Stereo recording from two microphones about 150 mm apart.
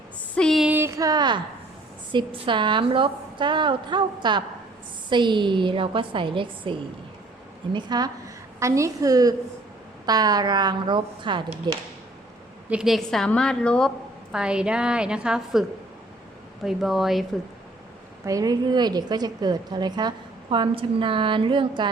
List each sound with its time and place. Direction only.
0.3 s a sound: centre (ahead or behind)
0.7 s a sound: 15° right (ahead or behind)
2.1 s a woman's voice: 35° right (ahead or behind)
12.6 s a woman's voice: 5° right (ahead or behind)
14.3 s a woman's voice: 5° right (ahead or behind)
16.6 s a woman's voice: centre (ahead or behind)
18.3 s a woman's voice: 25° right (ahead or behind)